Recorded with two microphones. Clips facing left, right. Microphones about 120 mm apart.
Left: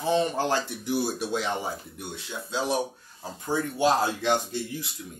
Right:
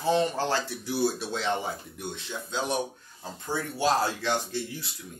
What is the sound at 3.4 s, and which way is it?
Speech, 15° left (ahead or behind).